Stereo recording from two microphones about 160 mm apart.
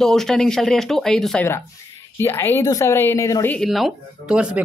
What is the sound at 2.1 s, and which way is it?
A woman's voice, 15° left (ahead or behind).